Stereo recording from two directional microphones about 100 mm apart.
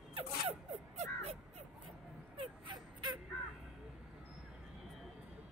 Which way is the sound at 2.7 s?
50° right (ahead or behind).